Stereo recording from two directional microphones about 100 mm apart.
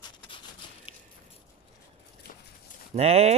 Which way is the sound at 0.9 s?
65° left (ahead or behind).